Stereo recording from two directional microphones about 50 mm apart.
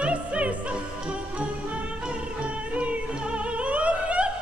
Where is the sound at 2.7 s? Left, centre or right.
Right.